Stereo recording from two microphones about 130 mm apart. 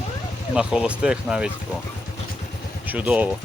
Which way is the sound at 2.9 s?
10° right (ahead or behind).